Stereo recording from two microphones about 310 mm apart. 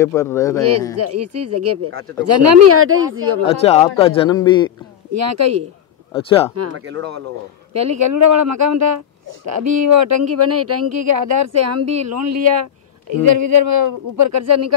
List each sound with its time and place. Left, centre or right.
0.0 s speech: centre
0.9 s speech: right
2.2 s speech: right
3.4 s speech: centre
5.1 s speech: right
6.1 s speech: centre
6.5 s speech: right
7.7 s speech: right